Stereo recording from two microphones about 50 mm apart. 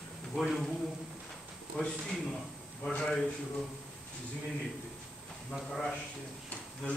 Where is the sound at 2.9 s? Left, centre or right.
Centre.